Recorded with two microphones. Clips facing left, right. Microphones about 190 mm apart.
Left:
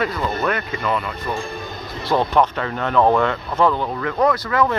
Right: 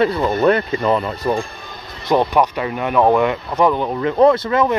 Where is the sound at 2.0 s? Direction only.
15° right (ahead or behind).